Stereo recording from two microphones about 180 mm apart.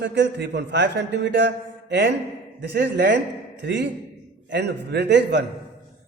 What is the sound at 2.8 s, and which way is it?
A man's voice, 70° right (ahead or behind).